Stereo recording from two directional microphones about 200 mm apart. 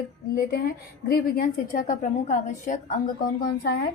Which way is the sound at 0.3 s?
50° left (ahead or behind).